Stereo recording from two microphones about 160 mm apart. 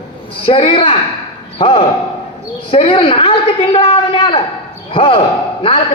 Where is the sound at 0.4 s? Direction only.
35° left (ahead or behind).